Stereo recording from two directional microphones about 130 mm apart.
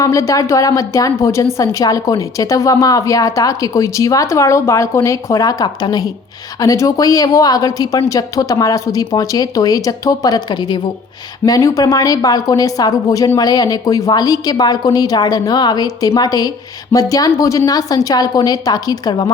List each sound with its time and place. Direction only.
0.0 s a woman's voice: 25° left (ahead or behind)